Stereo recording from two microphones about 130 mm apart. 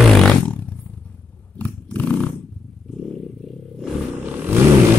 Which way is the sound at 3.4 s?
Centre (ahead or behind).